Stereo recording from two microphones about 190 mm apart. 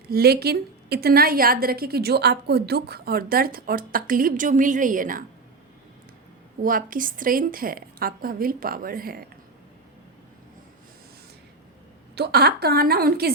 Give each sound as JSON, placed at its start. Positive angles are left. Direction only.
{"t": 0.1, "sound": "a woman's voice", "side_deg": -55}
{"t": 6.6, "sound": "a woman's voice", "side_deg": -45}
{"t": 12.1, "sound": "a woman's voice", "side_deg": -60}